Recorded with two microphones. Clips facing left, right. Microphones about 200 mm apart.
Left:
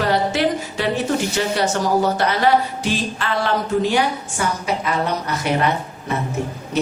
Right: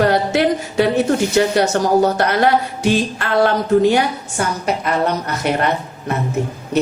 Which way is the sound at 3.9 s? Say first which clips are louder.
Right 2 dB; 55° right (ahead or behind).